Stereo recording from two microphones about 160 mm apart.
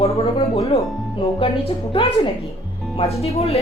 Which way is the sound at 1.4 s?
35° left (ahead or behind).